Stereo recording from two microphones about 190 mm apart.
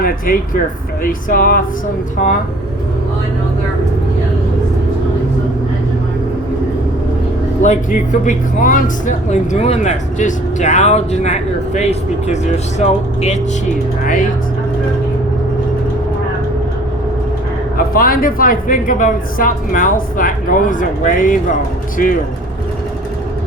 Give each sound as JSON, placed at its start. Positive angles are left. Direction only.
{"t": 0.0, "sound": "speech", "side_deg": 50}
{"t": 7.6, "sound": "speech", "side_deg": 40}
{"t": 17.7, "sound": "speech", "side_deg": 50}